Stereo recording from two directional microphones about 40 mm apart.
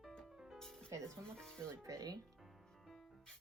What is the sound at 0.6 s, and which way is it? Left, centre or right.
Music, centre.